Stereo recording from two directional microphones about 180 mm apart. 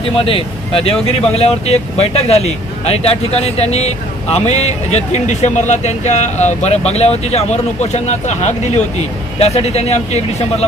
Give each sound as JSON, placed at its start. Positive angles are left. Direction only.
{"t": 0.1, "sound": "speech", "side_deg": 30}